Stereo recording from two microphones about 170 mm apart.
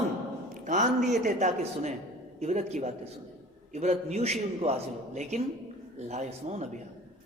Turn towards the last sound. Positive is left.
turn(degrees=-45)  # may be behind; listen again after turning